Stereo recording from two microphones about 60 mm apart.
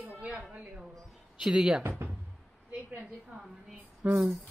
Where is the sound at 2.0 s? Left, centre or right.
Right.